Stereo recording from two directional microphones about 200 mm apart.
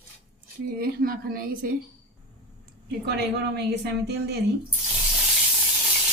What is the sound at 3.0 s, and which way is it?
Speech, 55° right (ahead or behind).